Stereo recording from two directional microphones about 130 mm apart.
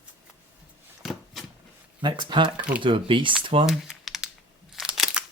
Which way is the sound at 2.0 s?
35° right (ahead or behind).